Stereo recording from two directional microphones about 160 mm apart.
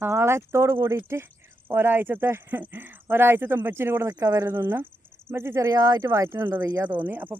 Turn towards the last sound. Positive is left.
turn(degrees=-10)  # may be behind; listen again after turning